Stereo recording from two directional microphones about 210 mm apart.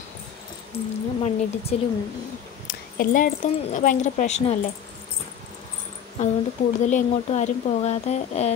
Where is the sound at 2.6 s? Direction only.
40° left (ahead or behind).